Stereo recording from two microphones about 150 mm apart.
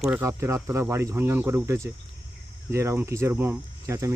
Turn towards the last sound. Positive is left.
turn(degrees=-20)  # may be behind; listen again after turning